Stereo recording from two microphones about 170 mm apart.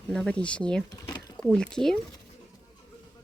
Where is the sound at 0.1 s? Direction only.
5° left (ahead or behind).